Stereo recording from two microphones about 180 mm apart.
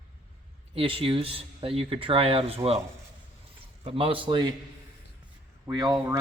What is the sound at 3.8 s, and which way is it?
Speech, 30° right (ahead or behind).